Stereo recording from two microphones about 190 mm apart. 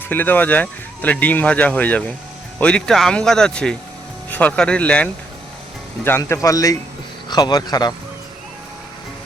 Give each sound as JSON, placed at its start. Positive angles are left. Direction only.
{"t": 0.1, "sound": "speech", "side_deg": 10}
{"t": 6.1, "sound": "speech", "side_deg": 15}